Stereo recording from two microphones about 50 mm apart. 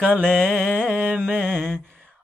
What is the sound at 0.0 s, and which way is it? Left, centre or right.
Mantra, right.